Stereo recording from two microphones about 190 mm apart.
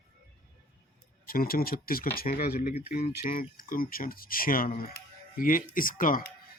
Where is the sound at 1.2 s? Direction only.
50° left (ahead or behind).